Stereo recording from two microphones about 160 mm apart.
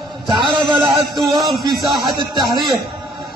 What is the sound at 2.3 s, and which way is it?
Speech, 30° right (ahead or behind).